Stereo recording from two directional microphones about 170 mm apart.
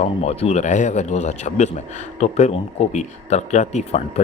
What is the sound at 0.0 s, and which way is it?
Speech, 40° left (ahead or behind).